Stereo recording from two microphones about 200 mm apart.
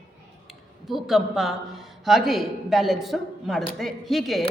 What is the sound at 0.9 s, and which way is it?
A woman's voice, centre (ahead or behind).